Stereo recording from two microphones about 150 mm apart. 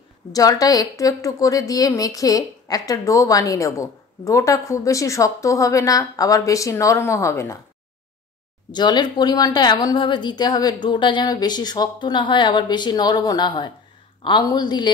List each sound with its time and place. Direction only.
0.3 s a woman's voice: 25° left (ahead or behind)
8.7 s a woman's voice: 30° left (ahead or behind)